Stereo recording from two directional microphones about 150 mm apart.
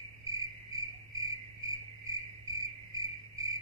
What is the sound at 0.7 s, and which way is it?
Cricket, 25° right (ahead or behind).